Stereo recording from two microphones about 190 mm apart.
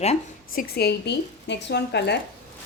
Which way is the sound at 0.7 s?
55° left (ahead or behind).